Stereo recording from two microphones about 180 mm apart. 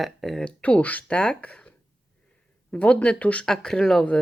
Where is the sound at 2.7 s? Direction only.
5° left (ahead or behind).